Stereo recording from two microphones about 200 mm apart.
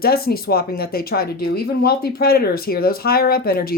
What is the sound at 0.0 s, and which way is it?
Speech, 50° left (ahead or behind).